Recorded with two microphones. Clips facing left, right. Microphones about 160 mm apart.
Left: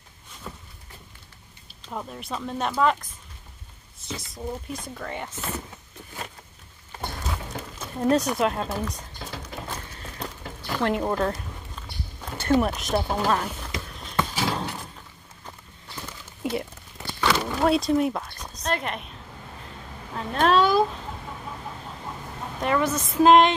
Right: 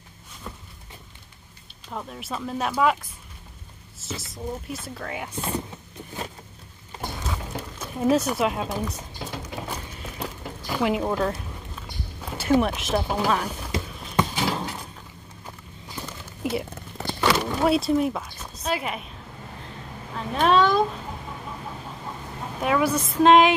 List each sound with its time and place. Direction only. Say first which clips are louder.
1.9 s speech: even; 5° left (ahead or behind); by 5.6 s 15° right (ahead or behind)
7.0 s a sound: right 1 dB; centre (ahead or behind)
13.8 s clip-clop: right 2 dB; 5° right (ahead or behind)
14.1 s horse: right 2 dB; 15° right (ahead or behind)
14.5 s a sound: even; 10° right (ahead or behind)
17.2 s wild animals: right 1 dB; 10° right (ahead or behind)
17.6 s speech: left 1 dB; centre (ahead or behind)
20.2 s speech: even; centre (ahead or behind)
22.6 s a woman's voice: right 2 dB; 5° right (ahead or behind)